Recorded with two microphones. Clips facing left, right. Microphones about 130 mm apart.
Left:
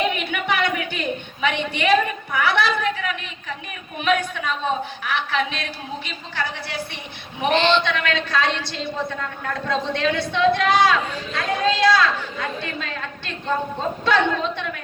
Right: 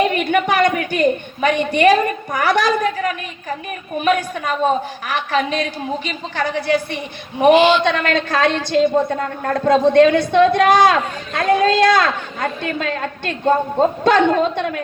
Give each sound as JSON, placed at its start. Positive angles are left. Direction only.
{"t": 0.1, "sound": "a sound", "side_deg": -50}
{"t": 4.0, "sound": "a woman's voice", "side_deg": -45}
{"t": 7.5, "sound": "speech", "side_deg": -10}
{"t": 7.9, "sound": "a woman's voice", "side_deg": -50}